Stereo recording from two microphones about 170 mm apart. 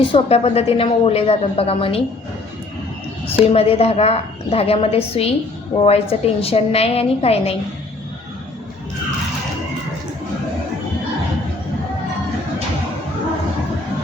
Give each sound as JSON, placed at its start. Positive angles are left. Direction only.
{"t": 0.1, "sound": "a woman's voice", "side_deg": 35}
{"t": 3.4, "sound": "a woman's voice", "side_deg": 35}